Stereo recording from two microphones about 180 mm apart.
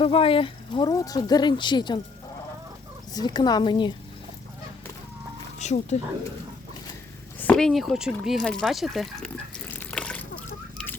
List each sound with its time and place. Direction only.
0.0 s speech: 30° left (ahead or behind)
3.1 s speech: 20° left (ahead or behind)
5.5 s speech: 40° left (ahead or behind)
7.3 s speech: 5° left (ahead or behind)
9.7 s water: 5° left (ahead or behind)